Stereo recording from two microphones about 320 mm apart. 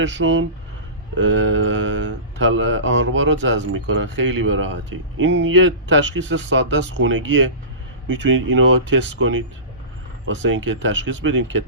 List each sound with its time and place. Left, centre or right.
0.0 s speech: right